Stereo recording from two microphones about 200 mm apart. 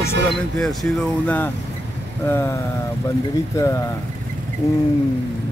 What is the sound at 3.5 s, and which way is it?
Speech, 15° left (ahead or behind).